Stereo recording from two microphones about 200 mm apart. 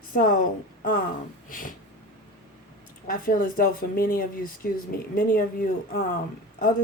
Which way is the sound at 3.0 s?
45° left (ahead or behind).